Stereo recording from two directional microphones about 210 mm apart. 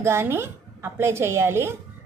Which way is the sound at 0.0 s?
10° right (ahead or behind).